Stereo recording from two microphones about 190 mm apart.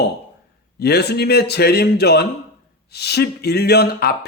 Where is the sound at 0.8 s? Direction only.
60° left (ahead or behind).